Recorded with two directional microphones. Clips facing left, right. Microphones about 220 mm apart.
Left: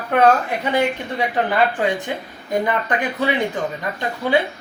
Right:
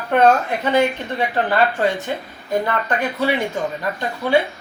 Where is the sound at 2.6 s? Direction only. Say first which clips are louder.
Even; 15° left (ahead or behind).